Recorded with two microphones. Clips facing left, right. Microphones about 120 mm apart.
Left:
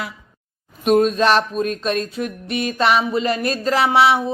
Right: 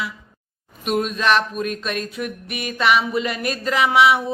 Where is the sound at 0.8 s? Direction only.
40° left (ahead or behind).